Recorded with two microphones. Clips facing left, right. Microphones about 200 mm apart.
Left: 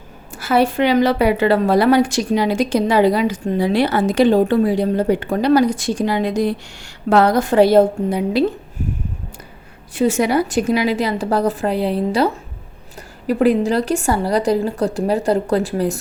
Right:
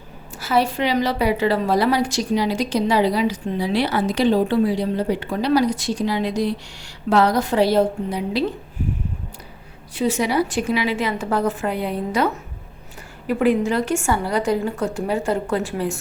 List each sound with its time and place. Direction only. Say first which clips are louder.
0.3 s a woman's voice: left 4 dB; 55° left (ahead or behind)
9.9 s a woman's voice: left 4 dB; 50° left (ahead or behind)